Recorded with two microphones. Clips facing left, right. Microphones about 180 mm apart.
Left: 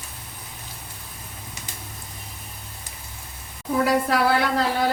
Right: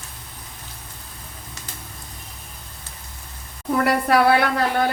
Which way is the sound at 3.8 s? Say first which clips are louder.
Right 2 dB; 65° right (ahead or behind).